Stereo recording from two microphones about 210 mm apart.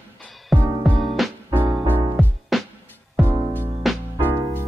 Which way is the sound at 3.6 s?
5° right (ahead or behind).